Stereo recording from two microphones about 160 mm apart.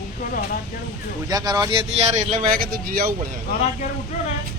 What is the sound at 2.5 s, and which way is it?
Speech, 60° right (ahead or behind).